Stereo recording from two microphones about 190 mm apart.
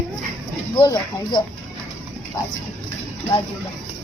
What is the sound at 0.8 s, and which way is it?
Speech, 25° left (ahead or behind).